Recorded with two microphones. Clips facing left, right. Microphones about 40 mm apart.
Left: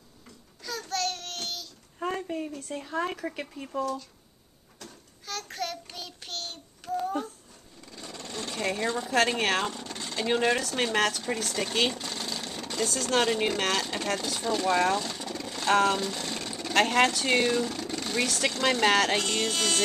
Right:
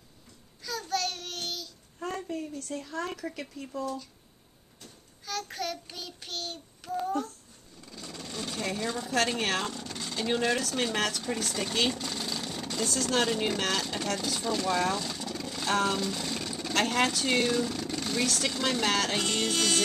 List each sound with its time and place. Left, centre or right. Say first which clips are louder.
0.7 s child singing: even; centre
2.0 s a sound: left 3 dB; centre
2.6 s speech: left 3 dB; centre
5.2 s child singing: even; centre
7.8 s sewing machine: left 1 dB; centre
8.4 s speech: left 3 dB; centre
18.6 s speech: left 6 dB; left
19.1 s music: left 1 dB; centre